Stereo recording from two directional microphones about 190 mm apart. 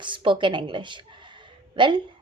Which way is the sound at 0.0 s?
25° right (ahead or behind).